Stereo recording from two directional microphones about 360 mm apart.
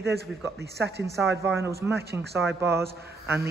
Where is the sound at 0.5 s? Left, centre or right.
Right.